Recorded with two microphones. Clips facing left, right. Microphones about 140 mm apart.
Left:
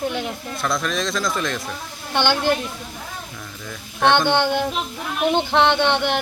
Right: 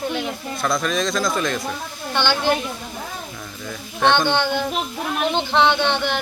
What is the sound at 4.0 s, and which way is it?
Speech, 15° left (ahead or behind).